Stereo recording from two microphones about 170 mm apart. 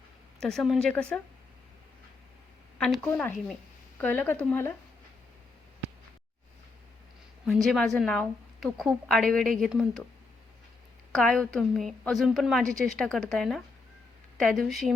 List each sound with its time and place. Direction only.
0.3 s a woman's voice: 5° left (ahead or behind)
2.7 s a woman's voice: 5° left (ahead or behind)
7.4 s a woman's voice: centre (ahead or behind)
11.1 s a woman's voice: 5° left (ahead or behind)